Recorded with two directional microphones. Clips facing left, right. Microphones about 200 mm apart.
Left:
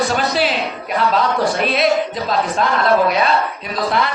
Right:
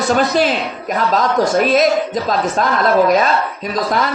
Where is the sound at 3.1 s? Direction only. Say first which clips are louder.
Right 3 dB; 40° right (ahead or behind).